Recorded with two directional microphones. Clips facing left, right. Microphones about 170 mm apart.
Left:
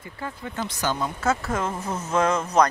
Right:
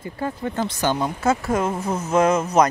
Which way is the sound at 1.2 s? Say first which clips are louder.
Right 4 dB; 15° right (ahead or behind).